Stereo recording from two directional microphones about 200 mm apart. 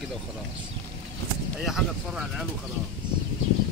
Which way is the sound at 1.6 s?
Centre (ahead or behind).